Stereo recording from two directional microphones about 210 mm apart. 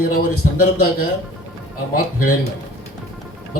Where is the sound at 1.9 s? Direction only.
45° left (ahead or behind).